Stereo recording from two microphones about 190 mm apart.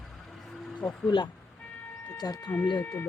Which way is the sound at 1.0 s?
25° left (ahead or behind).